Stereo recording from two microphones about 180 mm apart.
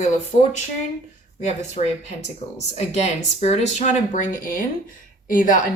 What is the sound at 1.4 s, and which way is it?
Speech, 40° left (ahead or behind).